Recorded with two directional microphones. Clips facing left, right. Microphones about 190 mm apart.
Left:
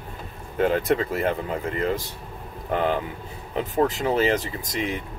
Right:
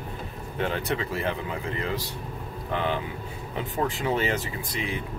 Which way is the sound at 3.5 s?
40° left (ahead or behind).